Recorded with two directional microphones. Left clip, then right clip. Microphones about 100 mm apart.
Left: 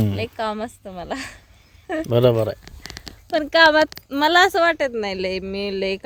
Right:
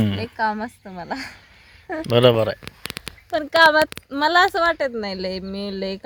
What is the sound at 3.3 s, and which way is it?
Speech, 50° left (ahead or behind).